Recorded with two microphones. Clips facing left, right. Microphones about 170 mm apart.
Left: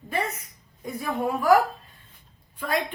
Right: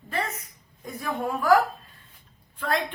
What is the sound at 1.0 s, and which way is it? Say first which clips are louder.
Speech: left 2 dB; 10° left (ahead or behind).